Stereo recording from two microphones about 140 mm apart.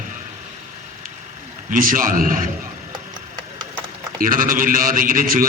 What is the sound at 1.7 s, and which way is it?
Speech, 80° right.